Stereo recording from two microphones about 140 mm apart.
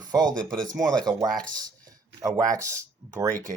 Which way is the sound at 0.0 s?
30° right (ahead or behind).